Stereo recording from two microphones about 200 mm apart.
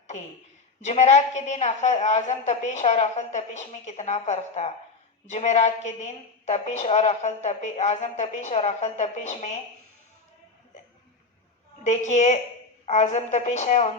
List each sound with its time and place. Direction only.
0.8 s a woman's voice: 35° left (ahead or behind)
11.8 s a woman's voice: 35° left (ahead or behind)